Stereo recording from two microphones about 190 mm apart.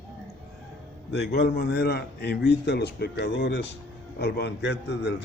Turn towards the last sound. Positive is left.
turn(degrees=65)  # may be behind; listen again after turning